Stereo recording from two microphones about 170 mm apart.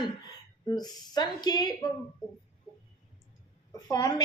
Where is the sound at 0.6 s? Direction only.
25° left (ahead or behind).